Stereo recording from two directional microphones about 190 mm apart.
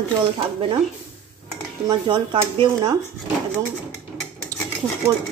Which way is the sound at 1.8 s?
25° right (ahead or behind).